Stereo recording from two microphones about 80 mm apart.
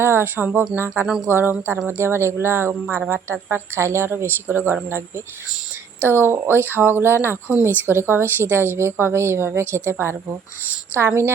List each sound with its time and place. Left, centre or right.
0.0 s speech: right
1.0 s speech: centre
1.3 s speech: right